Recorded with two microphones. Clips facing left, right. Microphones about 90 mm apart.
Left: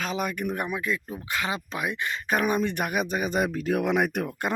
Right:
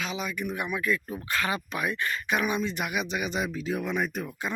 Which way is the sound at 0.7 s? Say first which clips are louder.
Right 1 dB; 25° left (ahead or behind).